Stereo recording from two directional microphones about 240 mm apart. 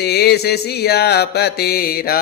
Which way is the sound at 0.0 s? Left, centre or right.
Left.